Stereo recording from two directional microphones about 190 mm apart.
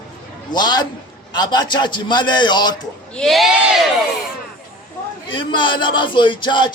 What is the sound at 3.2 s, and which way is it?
Speech, centre (ahead or behind).